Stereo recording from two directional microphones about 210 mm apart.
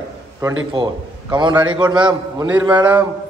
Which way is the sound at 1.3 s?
20° right (ahead or behind).